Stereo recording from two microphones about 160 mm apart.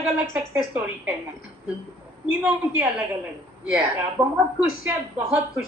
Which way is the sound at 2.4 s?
10° right (ahead or behind).